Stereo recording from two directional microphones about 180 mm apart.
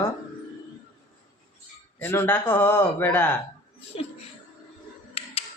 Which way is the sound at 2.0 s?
10° left (ahead or behind).